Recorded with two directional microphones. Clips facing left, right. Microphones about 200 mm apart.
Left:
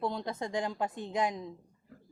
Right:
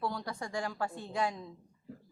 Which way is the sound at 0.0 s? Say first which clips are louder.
Left 3 dB; 20° left (ahead or behind).